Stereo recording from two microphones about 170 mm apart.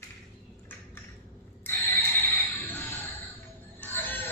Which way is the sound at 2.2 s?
10° left (ahead or behind).